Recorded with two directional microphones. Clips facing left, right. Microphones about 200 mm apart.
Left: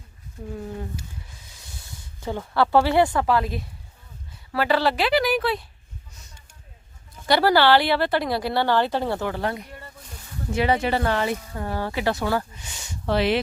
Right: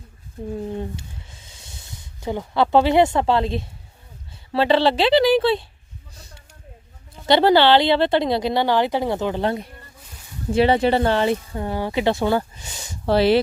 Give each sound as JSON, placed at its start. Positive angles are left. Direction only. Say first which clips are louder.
{"t": 0.5, "sound": "speech", "louder": "right 5 dB", "side_deg": -25}
{"t": 2.2, "sound": "speech", "louder": "right 2 dB", "side_deg": -15}
{"t": 7.3, "sound": "speech", "louder": "right 3 dB", "side_deg": -20}